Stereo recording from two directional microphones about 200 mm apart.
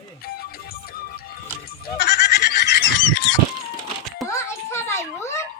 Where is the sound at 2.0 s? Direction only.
55° left (ahead or behind).